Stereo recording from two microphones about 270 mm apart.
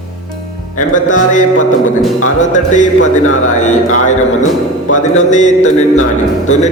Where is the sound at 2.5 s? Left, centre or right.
Left.